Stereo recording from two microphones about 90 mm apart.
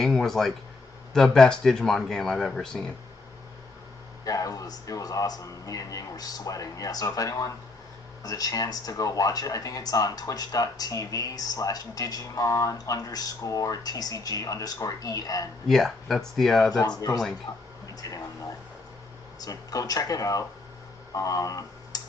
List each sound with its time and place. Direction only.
0.0 s speech: 5° left (ahead or behind)
4.2 s a man's voice: 40° left (ahead or behind)
15.6 s speech: 5° left (ahead or behind)
17.5 s speech: 45° left (ahead or behind)
19.4 s a man's voice: 40° left (ahead or behind)
21.1 s a sound: 40° left (ahead or behind)